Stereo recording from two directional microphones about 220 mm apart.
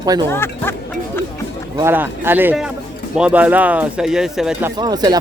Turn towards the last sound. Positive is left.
turn(degrees=-15)  # may be behind; listen again after turning